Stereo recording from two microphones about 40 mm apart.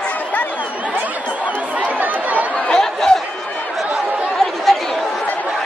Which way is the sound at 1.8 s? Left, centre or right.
Right.